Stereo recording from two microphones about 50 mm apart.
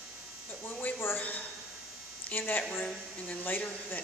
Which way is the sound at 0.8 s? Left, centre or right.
Left.